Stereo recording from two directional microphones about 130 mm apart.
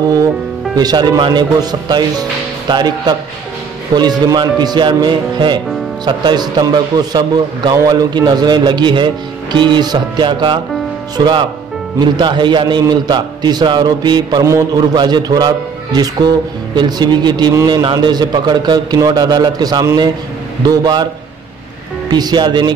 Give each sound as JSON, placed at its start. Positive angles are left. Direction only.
{"t": 0.7, "sound": "a man's voice", "side_deg": -30}
{"t": 22.1, "sound": "a man's voice", "side_deg": -35}